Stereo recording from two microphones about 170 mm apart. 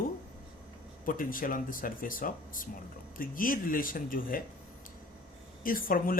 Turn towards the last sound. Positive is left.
turn(degrees=55)  # may be behind; listen again after turning